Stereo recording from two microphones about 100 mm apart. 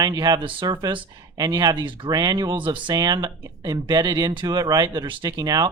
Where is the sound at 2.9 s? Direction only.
40° right (ahead or behind).